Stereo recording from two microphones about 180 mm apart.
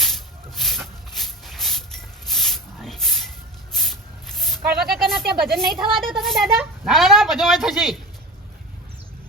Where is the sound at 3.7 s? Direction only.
Centre (ahead or behind).